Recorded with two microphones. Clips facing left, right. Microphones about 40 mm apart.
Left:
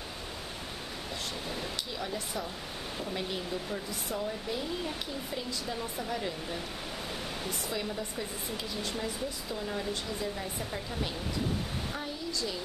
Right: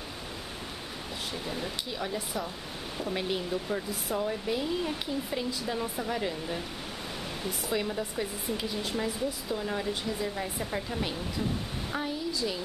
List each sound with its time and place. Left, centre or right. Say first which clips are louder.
1.5 s speech: right 2 dB; centre
3.1 s speech: right 5 dB; centre